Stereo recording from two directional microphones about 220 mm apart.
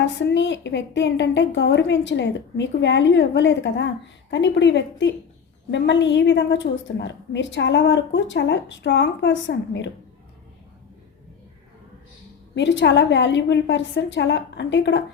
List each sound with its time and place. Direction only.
0.0 s a woman's voice: 55° left (ahead or behind)
12.5 s a woman's voice: 55° left (ahead or behind)